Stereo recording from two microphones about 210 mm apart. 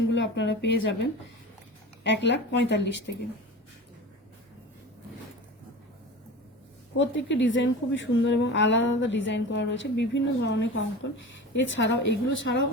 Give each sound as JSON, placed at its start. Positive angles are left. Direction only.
{"t": 0.1, "sound": "speech", "side_deg": 60}
{"t": 2.0, "sound": "a woman's voice", "side_deg": 60}
{"t": 6.9, "sound": "a woman's voice", "side_deg": 60}